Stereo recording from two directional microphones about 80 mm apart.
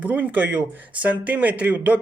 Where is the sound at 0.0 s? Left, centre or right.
Right.